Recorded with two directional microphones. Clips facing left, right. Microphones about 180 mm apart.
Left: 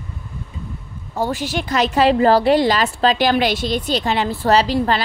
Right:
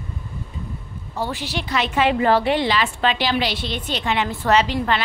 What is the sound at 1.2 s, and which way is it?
A woman's voice, 45° left (ahead or behind).